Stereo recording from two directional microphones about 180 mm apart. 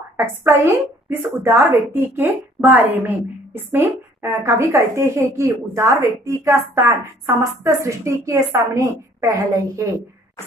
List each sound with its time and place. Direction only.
0.4 s a woman's voice: 10° right (ahead or behind)